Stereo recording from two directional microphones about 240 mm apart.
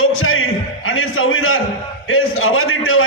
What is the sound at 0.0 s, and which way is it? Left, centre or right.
Music, left.